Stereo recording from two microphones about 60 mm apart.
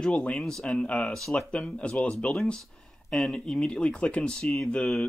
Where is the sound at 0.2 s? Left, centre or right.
Centre.